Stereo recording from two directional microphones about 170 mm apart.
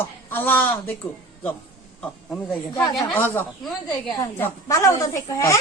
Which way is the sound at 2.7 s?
20° left (ahead or behind).